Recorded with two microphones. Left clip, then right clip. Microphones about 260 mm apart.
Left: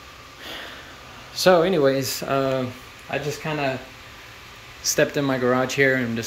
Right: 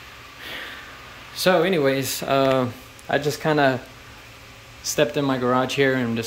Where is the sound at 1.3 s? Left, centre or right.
Centre.